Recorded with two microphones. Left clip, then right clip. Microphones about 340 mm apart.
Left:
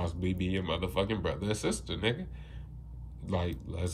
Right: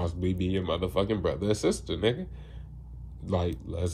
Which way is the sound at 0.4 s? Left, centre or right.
Centre.